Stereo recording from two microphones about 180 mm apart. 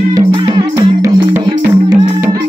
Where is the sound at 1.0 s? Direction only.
10° right (ahead or behind).